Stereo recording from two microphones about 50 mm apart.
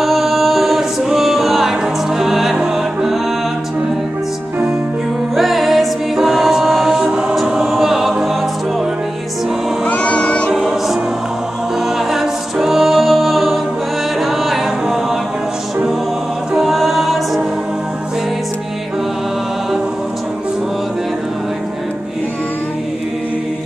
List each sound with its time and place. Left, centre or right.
0.0 s music: centre
5.3 s music: centre
7.4 s choir: centre
9.8 s music: left
12.0 s music: centre
16.5 s a capella: centre